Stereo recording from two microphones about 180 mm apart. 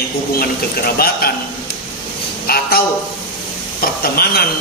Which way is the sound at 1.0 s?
60° left (ahead or behind).